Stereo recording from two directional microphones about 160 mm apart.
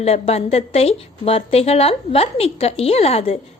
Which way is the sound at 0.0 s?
40° left (ahead or behind).